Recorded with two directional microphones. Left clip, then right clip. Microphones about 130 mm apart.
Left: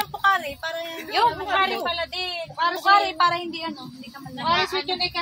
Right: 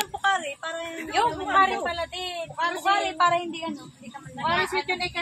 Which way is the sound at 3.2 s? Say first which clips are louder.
Left 1 dB; 20° left (ahead or behind).